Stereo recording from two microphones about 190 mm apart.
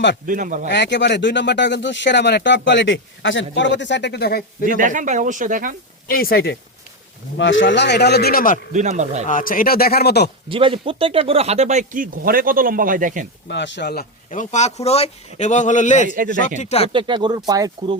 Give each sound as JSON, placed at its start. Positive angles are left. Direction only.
{"t": 0.3, "sound": "speech", "side_deg": -45}
{"t": 0.7, "sound": "speech", "side_deg": 65}
{"t": 4.6, "sound": "speech", "side_deg": -45}
{"t": 6.1, "sound": "speech", "side_deg": 50}
{"t": 7.3, "sound": "speech", "side_deg": 75}
{"t": 8.7, "sound": "speech", "side_deg": -40}
{"t": 9.2, "sound": "speech", "side_deg": 45}
{"t": 10.5, "sound": "speech", "side_deg": -25}
{"t": 13.5, "sound": "speech", "side_deg": 70}
{"t": 14.3, "sound": "a man's voice", "side_deg": 40}
{"t": 16.0, "sound": "speech", "side_deg": -45}
{"t": 16.6, "sound": "a man's voice", "side_deg": 35}
{"t": 16.9, "sound": "speech", "side_deg": -25}